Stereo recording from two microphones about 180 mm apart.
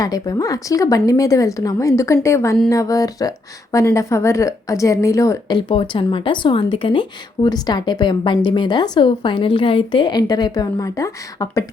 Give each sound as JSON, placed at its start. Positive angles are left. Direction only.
{"t": 0.0, "sound": "a woman's voice", "side_deg": 20}